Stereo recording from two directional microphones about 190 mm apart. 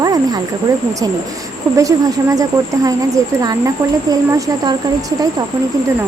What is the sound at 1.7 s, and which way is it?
Speech, 15° right (ahead or behind).